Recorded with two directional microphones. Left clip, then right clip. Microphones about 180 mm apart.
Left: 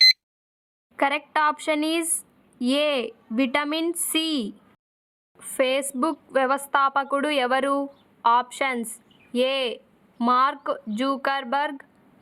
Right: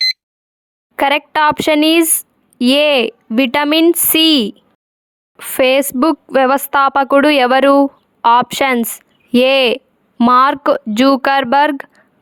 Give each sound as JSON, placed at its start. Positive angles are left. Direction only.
{"t": 0.9, "sound": "a woman's voice", "side_deg": -60}